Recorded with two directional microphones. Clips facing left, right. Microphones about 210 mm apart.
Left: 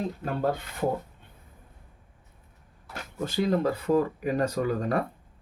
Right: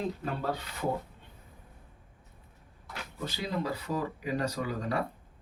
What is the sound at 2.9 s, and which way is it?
Speech, 50° left (ahead or behind).